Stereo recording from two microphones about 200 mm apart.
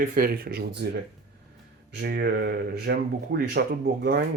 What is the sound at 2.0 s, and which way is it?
Speech, 55° right (ahead or behind).